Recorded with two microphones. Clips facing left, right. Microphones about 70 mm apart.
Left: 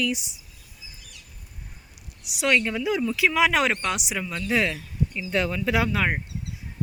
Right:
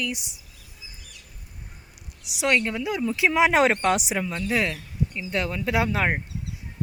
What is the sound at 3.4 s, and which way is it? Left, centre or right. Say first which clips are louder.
Speech: right 4 dB; right.